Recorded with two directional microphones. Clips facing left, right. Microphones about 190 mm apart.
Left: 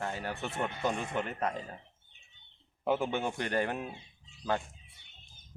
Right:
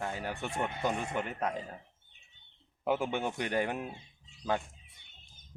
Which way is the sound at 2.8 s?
10° right (ahead or behind).